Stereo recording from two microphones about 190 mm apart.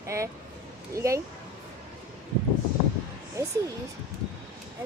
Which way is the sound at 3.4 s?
15° right (ahead or behind).